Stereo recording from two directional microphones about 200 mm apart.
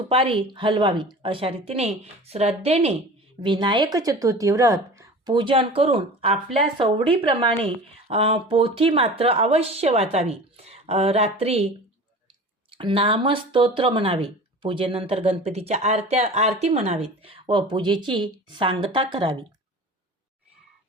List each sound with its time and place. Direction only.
0.1 s speech: 25° right (ahead or behind)
12.7 s speech: 25° right (ahead or behind)